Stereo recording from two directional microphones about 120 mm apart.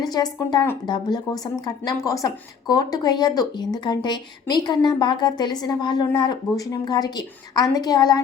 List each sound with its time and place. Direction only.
0.0 s a woman's voice: 35° left (ahead or behind)